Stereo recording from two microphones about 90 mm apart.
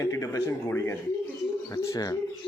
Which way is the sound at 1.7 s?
40° left (ahead or behind).